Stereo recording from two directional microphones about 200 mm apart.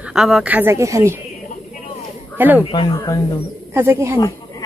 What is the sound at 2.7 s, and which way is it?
Speech, 25° left (ahead or behind).